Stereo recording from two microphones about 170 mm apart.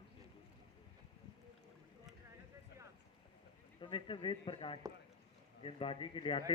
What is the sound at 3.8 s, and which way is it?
A man's voice, 30° left (ahead or behind).